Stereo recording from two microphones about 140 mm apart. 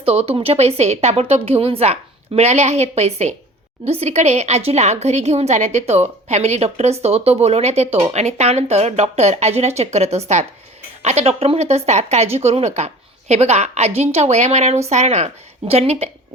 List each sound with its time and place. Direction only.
0.0 s speech: 45° right (ahead or behind)